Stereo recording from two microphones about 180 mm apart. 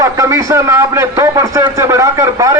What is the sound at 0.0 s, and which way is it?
A man's voice, 20° right (ahead or behind).